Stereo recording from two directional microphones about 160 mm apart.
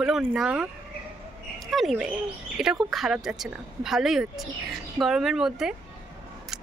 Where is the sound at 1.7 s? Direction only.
Centre (ahead or behind).